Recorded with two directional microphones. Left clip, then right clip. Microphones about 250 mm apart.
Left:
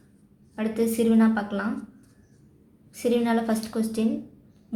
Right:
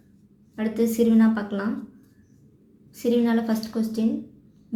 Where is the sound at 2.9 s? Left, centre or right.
Centre.